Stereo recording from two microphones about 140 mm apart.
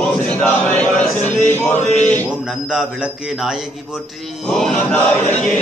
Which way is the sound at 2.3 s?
5° right (ahead or behind).